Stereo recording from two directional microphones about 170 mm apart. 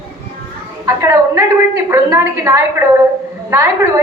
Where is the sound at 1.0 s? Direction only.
20° right (ahead or behind).